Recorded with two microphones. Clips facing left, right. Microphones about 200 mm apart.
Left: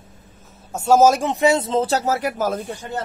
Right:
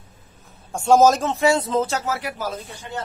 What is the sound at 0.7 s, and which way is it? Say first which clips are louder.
Speech: left 1 dB; 5° left (ahead or behind).